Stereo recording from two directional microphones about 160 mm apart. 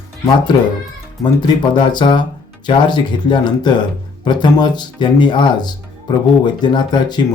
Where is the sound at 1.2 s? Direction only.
30° left (ahead or behind).